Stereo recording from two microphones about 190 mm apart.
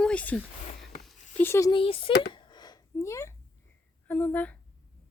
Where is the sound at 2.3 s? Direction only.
25° left (ahead or behind).